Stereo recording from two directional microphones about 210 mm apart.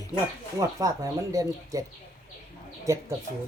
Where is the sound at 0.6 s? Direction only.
15° right (ahead or behind).